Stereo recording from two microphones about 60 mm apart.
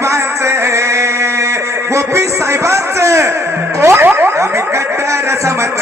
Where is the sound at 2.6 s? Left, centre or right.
Right.